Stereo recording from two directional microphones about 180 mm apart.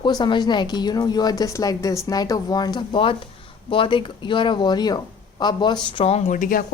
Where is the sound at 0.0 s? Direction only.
25° left (ahead or behind).